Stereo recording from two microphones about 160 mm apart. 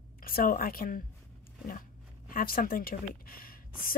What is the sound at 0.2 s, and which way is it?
Speech, 65° left (ahead or behind).